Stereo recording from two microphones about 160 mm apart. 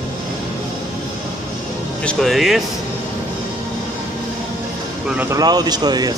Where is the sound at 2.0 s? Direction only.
5° left (ahead or behind).